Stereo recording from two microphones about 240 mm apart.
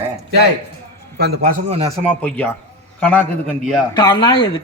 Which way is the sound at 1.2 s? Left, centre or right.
Right.